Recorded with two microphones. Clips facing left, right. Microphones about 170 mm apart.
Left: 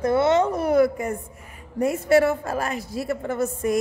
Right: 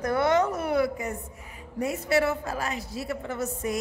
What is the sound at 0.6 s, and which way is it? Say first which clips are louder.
A woman's voice: left 6 dB; 45° left (ahead or behind).